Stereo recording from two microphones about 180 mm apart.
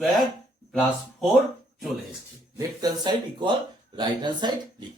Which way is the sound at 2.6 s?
20° right (ahead or behind).